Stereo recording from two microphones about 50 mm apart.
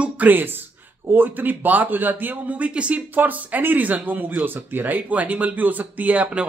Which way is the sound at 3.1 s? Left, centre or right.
Right.